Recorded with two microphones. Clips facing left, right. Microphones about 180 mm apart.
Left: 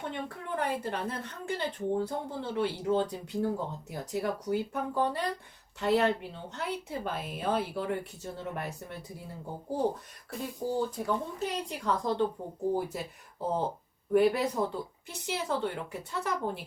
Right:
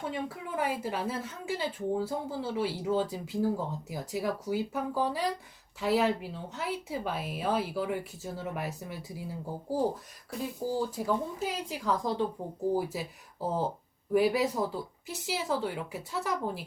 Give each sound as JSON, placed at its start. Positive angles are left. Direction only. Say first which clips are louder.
{"t": 0.0, "sound": "a woman's voice", "louder": "right 2 dB", "side_deg": -5}